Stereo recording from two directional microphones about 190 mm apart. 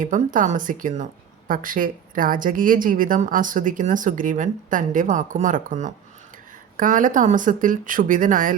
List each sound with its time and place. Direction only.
0.0 s a woman's voice: 45° right (ahead or behind)